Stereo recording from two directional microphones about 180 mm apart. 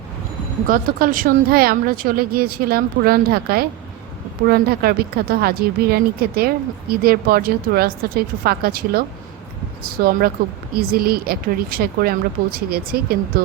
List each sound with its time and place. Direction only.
0.7 s speech: 50° right (ahead or behind)